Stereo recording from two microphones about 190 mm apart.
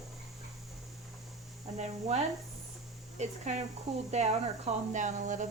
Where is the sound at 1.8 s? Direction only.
35° right (ahead or behind).